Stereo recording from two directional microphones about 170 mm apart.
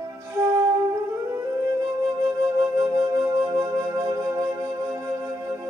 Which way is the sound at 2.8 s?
20° right (ahead or behind).